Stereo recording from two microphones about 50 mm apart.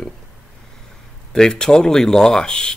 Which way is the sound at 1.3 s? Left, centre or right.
Centre.